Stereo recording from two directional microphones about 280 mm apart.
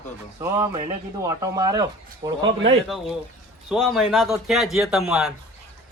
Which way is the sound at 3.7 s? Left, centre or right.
Centre.